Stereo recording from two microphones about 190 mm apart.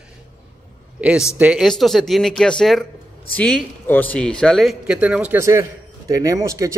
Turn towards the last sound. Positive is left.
turn(degrees=-15)  # may be behind; listen again after turning